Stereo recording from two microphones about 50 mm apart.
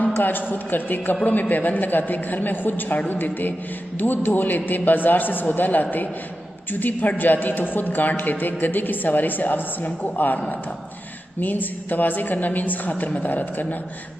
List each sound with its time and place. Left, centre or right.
0.2 s a woman's voice: left
11.4 s a woman's voice: left